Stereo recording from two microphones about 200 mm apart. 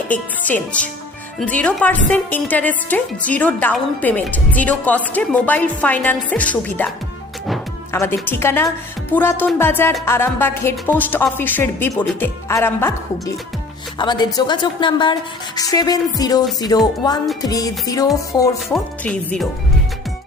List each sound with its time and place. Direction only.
0.1 s a woman's voice: 5° left (ahead or behind)
7.9 s a woman's voice: 10° left (ahead or behind)
18.7 s speech: 5° left (ahead or behind)